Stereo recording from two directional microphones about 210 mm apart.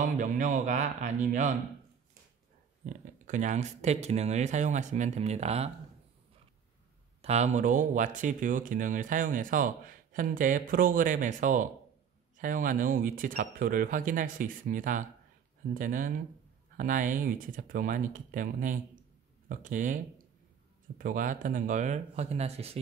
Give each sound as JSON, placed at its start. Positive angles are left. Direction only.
{"t": 0.0, "sound": "speech", "side_deg": -35}
{"t": 2.9, "sound": "speech", "side_deg": -35}
{"t": 7.2, "sound": "speech", "side_deg": -30}
{"t": 21.0, "sound": "speech", "side_deg": -40}